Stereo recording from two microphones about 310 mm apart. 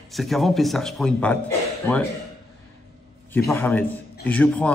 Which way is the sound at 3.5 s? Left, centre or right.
Centre.